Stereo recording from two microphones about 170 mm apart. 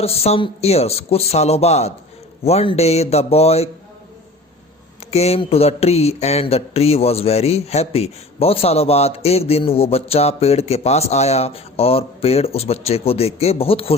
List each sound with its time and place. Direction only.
0.0 s speech: 35° left (ahead or behind)
5.1 s speech: 40° left (ahead or behind)